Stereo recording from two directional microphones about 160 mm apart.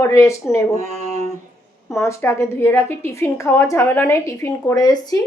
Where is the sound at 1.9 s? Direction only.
20° left (ahead or behind).